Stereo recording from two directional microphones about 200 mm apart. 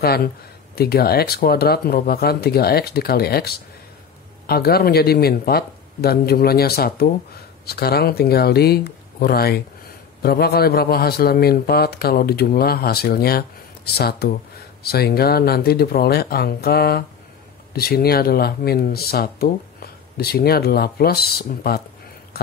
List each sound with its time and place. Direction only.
0.0 s speech: 50° left (ahead or behind)